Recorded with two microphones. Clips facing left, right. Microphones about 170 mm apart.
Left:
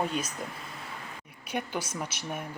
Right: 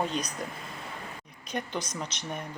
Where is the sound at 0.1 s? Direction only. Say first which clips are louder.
Even; 5° left (ahead or behind).